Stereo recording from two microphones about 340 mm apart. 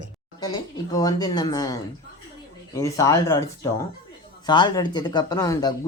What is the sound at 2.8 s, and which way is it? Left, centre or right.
Speech, centre.